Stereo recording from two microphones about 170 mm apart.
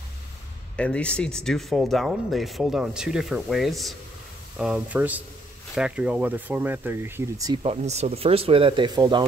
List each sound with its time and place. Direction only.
0.7 s speech: 5° left (ahead or behind); by 7.5 s 15° right (ahead or behind)
7.6 s speech: 40° right (ahead or behind)